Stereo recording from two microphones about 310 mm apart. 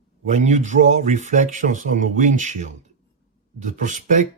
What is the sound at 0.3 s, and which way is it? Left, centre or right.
Speech, right.